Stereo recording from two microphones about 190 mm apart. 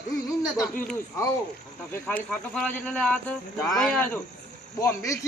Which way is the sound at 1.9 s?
10° left (ahead or behind).